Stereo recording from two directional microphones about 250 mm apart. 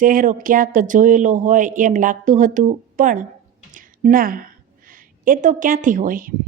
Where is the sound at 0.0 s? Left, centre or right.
Right.